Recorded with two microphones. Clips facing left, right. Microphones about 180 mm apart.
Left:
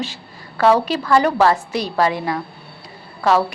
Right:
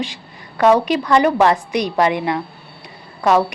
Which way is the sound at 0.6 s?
15° right (ahead or behind).